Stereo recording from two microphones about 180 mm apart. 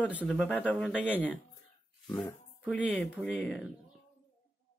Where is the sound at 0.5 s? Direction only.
10° left (ahead or behind).